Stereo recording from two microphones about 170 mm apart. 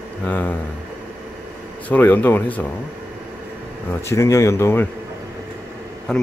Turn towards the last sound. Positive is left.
turn(degrees=5)  # may be behind; listen again after turning